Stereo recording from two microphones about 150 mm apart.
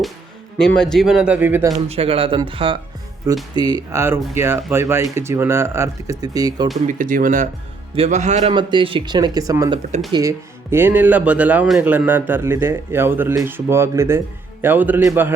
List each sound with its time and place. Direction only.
0.6 s speech: 5° left (ahead or behind); by 1.7 s 15° right (ahead or behind)
1.9 s speech: 40° right (ahead or behind)
6.8 s speech: 60° right (ahead or behind)
7.9 s speech: 45° right (ahead or behind)
8.5 s speech: 35° right (ahead or behind); by 15.3 s 15° right (ahead or behind)